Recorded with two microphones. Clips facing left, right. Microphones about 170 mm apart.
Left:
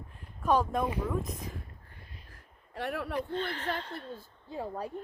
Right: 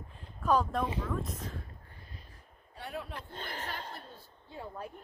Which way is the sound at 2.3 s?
90° left.